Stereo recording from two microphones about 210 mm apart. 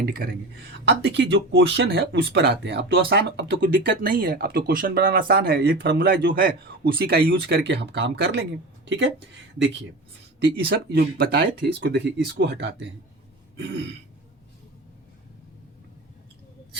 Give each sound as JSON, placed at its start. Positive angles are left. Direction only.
{"t": 0.0, "sound": "speech", "side_deg": -45}
{"t": 10.4, "sound": "speech", "side_deg": -55}
{"t": 13.6, "sound": "throat clearing", "side_deg": -55}